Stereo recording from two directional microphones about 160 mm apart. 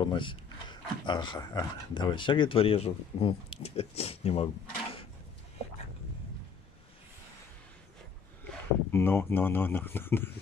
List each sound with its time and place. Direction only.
0.0 s speech: 30° left (ahead or behind)
8.5 s speech: 15° left (ahead or behind)